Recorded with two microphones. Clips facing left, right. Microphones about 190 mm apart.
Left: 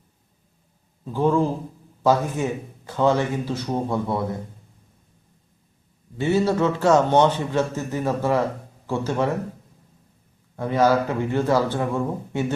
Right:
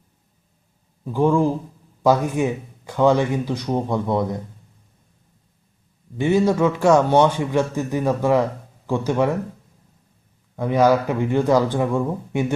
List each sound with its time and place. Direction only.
1.0 s a man's voice: 15° right (ahead or behind)
6.1 s a man's voice: 15° right (ahead or behind)
10.6 s a man's voice: 15° right (ahead or behind)